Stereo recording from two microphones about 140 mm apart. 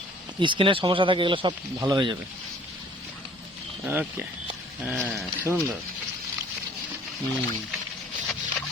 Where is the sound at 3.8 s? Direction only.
10° right (ahead or behind).